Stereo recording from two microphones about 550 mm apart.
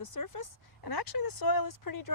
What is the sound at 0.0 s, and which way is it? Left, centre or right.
Speech, left.